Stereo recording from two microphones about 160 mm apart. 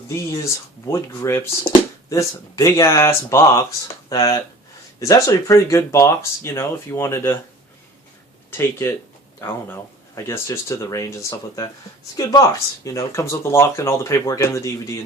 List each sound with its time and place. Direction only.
0.1 s speech: 20° left (ahead or behind)
8.4 s speech: 15° left (ahead or behind)
10.2 s speech: 15° left (ahead or behind)